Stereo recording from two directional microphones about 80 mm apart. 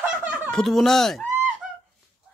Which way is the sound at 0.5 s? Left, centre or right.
Centre.